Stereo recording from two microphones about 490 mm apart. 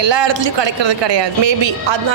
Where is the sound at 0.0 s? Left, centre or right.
Right.